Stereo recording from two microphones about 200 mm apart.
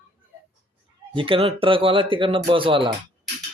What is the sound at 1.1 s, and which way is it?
Speech, 25° right (ahead or behind).